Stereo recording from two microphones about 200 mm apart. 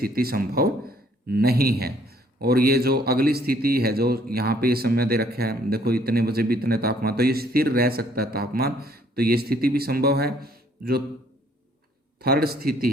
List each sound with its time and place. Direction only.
0.0 s speech: 50° right (ahead or behind)
12.2 s speech: 50° right (ahead or behind)